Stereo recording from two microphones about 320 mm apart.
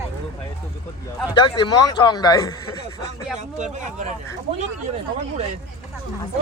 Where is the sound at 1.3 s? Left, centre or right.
Centre.